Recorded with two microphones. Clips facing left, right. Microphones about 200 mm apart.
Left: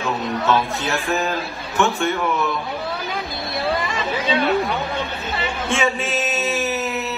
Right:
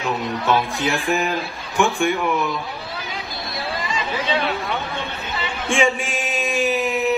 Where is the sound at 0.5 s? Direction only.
15° right (ahead or behind).